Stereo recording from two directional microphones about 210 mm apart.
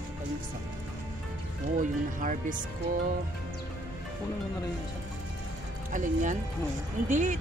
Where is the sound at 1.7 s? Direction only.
40° right (ahead or behind).